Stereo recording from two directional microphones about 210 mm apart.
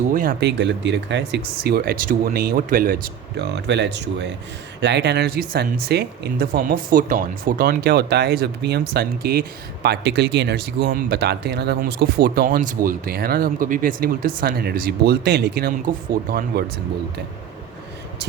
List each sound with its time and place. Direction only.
0.1 s speech: 40° right (ahead or behind)